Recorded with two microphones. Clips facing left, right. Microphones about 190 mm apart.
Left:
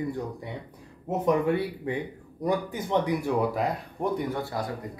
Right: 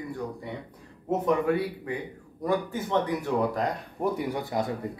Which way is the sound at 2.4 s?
15° left (ahead or behind).